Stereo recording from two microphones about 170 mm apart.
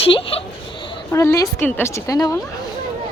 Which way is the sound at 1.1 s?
15° left (ahead or behind).